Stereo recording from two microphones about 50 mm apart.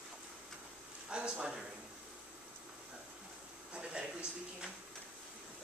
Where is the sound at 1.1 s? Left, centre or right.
Centre.